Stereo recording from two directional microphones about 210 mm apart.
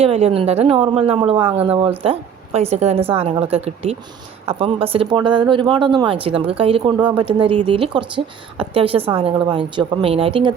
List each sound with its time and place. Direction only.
0.0 s speech: 30° right (ahead or behind)